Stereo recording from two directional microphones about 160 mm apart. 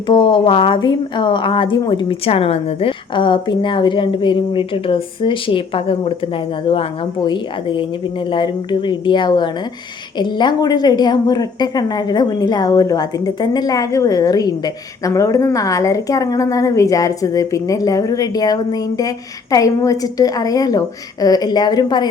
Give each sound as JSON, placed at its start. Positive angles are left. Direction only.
{"t": 0.1, "sound": "a woman's voice", "side_deg": 30}